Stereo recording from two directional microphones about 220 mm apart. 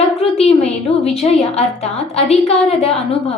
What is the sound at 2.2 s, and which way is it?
Speech, 30° left (ahead or behind).